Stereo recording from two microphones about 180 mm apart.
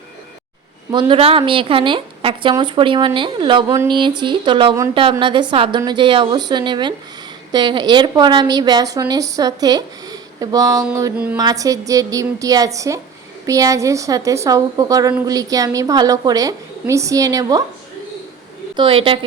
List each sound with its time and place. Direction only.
0.9 s a woman's voice: 25° right (ahead or behind)
18.8 s a woman's voice: 30° right (ahead or behind)